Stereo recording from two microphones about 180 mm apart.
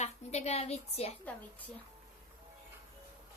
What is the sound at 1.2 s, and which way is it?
Speech, 10° left (ahead or behind).